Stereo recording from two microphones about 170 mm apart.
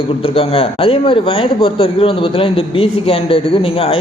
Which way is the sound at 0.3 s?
35° left (ahead or behind).